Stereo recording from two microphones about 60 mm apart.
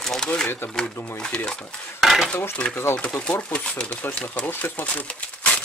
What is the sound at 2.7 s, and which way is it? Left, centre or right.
Speech, left.